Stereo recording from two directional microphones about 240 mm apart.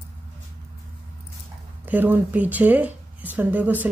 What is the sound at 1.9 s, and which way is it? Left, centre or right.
A woman's voice, centre.